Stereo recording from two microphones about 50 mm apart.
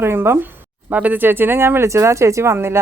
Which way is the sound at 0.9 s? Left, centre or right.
Right.